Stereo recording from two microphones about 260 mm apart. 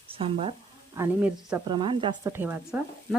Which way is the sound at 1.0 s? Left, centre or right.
Centre.